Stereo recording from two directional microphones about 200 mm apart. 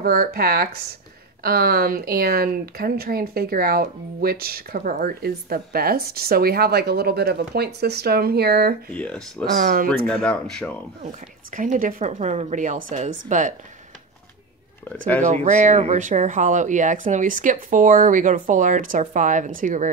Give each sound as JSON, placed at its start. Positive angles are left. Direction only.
{"t": 0.0, "sound": "speech", "side_deg": -50}
{"t": 8.9, "sound": "speech", "side_deg": 5}
{"t": 9.6, "sound": "speech", "side_deg": -40}
{"t": 9.8, "sound": "speech", "side_deg": 5}
{"t": 11.0, "sound": "speech", "side_deg": -40}
{"t": 15.2, "sound": "speech", "side_deg": -35}